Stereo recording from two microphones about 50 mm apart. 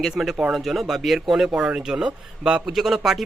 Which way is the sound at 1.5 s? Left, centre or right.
Right.